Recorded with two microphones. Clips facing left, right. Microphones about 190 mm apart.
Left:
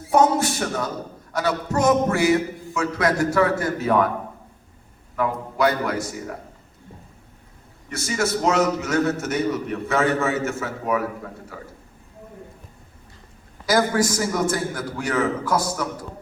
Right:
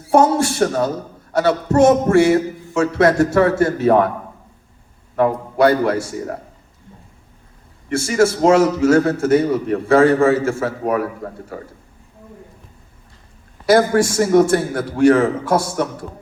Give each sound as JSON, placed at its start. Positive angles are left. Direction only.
{"t": 0.1, "sound": "a man's voice", "side_deg": -30}
{"t": 5.1, "sound": "a man's voice", "side_deg": -30}
{"t": 7.9, "sound": "a man's voice", "side_deg": -30}
{"t": 14.0, "sound": "a man's voice", "side_deg": -25}
{"t": 14.5, "sound": "a man's voice", "side_deg": -60}
{"t": 15.0, "sound": "a man's voice", "side_deg": -30}